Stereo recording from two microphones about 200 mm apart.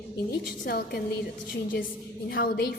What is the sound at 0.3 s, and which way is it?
Speech, 50° left (ahead or behind).